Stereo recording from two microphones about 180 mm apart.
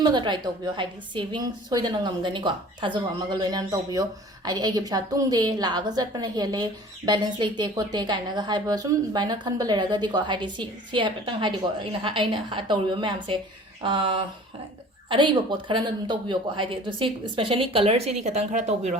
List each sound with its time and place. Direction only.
0.0 s a woman's voice: 25° right (ahead or behind)